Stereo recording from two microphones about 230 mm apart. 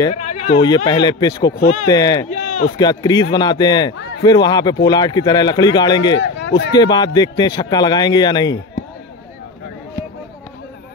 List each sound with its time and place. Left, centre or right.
0.1 s speech: left
0.8 s speech: centre
2.2 s a sound: left
2.8 s speech: centre
6.1 s speech: left
6.7 s speech: centre